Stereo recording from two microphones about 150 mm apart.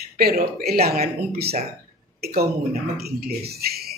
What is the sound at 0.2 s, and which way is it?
Speech, 90° right.